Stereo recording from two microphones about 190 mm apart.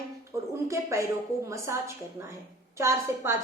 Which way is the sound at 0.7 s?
15° right (ahead or behind).